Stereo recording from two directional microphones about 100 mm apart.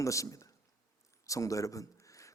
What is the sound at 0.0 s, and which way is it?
A man's voice, 30° left (ahead or behind).